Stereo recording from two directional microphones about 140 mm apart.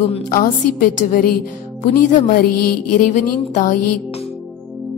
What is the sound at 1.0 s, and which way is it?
Speech, 75° left (ahead or behind).